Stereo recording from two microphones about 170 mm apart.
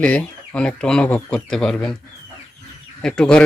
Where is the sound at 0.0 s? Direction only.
5° left (ahead or behind).